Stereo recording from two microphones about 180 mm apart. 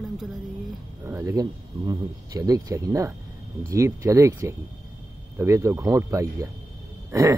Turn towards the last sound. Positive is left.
turn(degrees=-20)  # may be behind; listen again after turning